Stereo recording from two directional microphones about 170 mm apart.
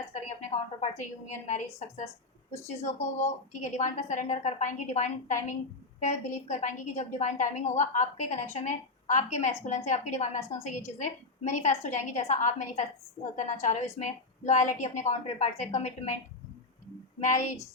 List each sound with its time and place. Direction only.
0.1 s a sound: 45° left (ahead or behind)
0.8 s a woman's voice: 45° left (ahead or behind)
2.6 s a woman's voice: 40° left (ahead or behind)
17.2 s a woman's voice: 45° left (ahead or behind)